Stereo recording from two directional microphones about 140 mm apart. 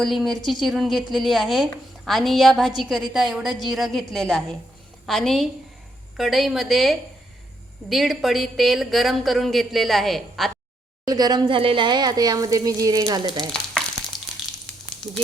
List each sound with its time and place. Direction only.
0.0 s a woman's voice: centre (ahead or behind)
11.0 s speech: 30° right (ahead or behind)
13.5 s frying: 5° left (ahead or behind)